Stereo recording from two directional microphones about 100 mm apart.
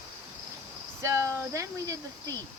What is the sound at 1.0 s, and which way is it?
Speech, 30° right (ahead or behind).